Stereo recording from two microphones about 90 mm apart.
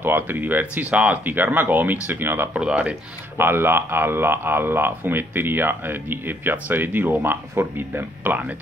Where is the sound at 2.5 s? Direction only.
10° right (ahead or behind).